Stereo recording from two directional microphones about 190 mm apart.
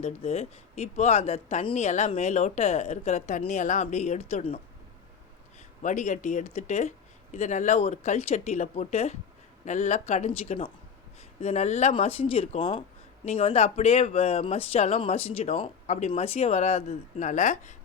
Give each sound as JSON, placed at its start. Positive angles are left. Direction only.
{"t": 0.0, "sound": "speech", "side_deg": 35}
{"t": 5.8, "sound": "speech", "side_deg": 40}